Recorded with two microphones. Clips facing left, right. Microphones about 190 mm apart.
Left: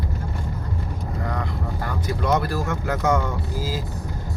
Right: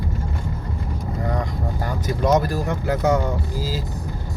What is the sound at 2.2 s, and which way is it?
Speech, 40° right (ahead or behind).